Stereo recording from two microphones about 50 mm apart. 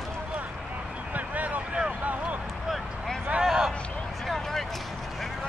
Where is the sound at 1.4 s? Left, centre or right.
Right.